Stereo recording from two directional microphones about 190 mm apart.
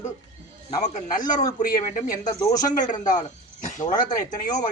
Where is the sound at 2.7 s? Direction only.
40° left (ahead or behind).